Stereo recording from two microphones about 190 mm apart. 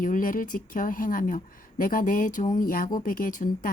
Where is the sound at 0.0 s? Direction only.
45° left (ahead or behind).